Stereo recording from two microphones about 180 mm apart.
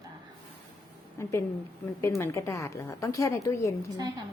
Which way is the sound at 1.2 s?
15° left (ahead or behind).